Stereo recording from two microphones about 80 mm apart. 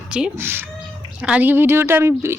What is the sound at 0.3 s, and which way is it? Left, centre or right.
Speech, right.